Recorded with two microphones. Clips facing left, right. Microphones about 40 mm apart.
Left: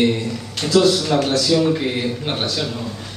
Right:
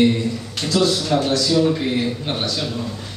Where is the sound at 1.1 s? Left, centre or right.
Left.